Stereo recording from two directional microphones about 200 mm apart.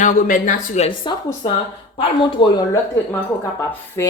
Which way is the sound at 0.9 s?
20° left (ahead or behind).